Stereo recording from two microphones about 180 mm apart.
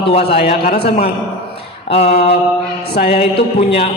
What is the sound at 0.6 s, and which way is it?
Speech, 50° left (ahead or behind).